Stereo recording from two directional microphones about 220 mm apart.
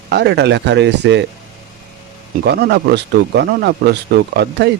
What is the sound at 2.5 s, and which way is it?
Speech, 45° right (ahead or behind).